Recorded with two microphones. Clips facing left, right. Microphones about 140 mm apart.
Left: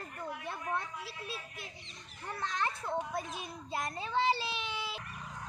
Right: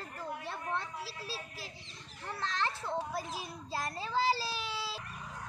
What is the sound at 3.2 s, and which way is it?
A woman's voice, 30° right (ahead or behind).